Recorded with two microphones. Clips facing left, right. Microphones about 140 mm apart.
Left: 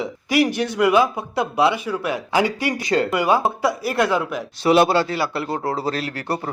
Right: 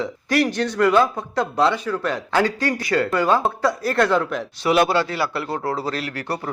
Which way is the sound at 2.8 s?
20° left (ahead or behind).